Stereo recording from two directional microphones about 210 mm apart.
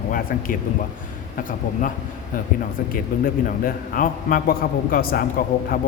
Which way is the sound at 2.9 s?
40° left (ahead or behind).